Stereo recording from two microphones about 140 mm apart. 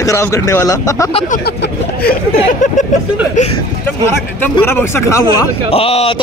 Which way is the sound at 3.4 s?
60° left (ahead or behind).